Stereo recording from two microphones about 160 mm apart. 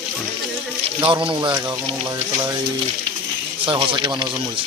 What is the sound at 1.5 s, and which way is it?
Speech, 25° right (ahead or behind).